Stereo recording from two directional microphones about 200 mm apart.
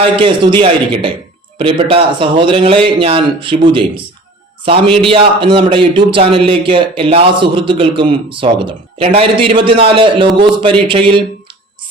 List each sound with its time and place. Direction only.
0.0 s a man's voice: 25° right (ahead or behind)